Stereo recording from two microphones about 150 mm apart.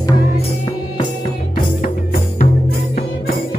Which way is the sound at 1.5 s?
70° left (ahead or behind).